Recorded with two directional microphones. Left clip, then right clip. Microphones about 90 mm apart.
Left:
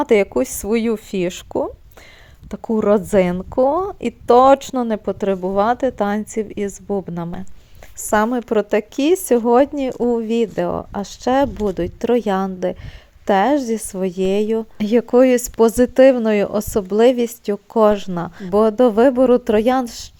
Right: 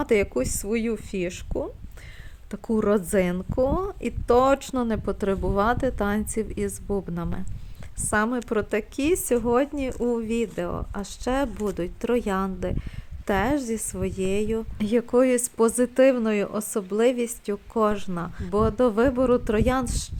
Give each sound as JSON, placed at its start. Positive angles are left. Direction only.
{"t": 0.0, "sound": "speech", "side_deg": 35}
{"t": 2.5, "sound": "a woman's voice", "side_deg": 20}
{"t": 7.9, "sound": "speech", "side_deg": 50}
{"t": 11.5, "sound": "speech", "side_deg": 20}
{"t": 11.8, "sound": "speech", "side_deg": 35}